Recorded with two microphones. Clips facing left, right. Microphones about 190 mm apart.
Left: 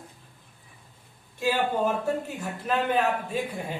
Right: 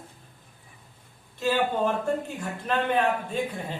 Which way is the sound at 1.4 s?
10° left (ahead or behind).